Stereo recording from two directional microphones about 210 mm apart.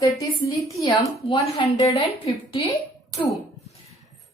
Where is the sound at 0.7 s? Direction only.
15° left (ahead or behind).